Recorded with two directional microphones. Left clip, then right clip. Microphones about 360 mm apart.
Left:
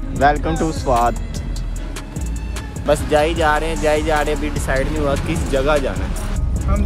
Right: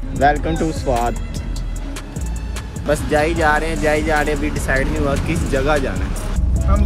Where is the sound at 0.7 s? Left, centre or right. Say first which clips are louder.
Left 4 dB; centre.